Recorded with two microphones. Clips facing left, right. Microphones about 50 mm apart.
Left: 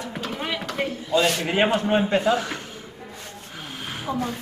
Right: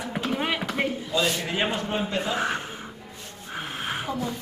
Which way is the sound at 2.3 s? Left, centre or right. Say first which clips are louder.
Left 1 dB; right.